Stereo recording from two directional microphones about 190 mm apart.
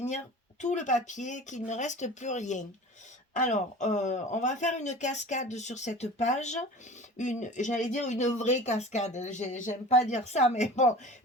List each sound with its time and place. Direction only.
0.6 s speech: 40° left (ahead or behind)